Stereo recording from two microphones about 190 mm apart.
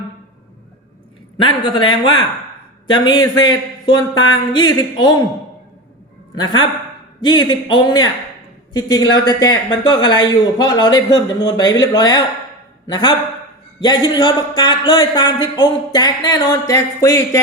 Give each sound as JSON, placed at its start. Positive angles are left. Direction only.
{"t": 1.4, "sound": "speech", "side_deg": 25}
{"t": 6.4, "sound": "speech", "side_deg": 25}